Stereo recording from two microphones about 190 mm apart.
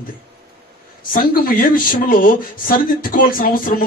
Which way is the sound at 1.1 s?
45° left (ahead or behind).